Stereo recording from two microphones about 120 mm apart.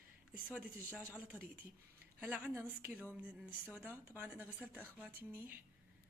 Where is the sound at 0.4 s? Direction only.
10° right (ahead or behind).